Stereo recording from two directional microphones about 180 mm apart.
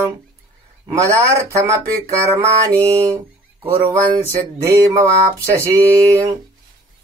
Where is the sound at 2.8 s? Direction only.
15° right (ahead or behind).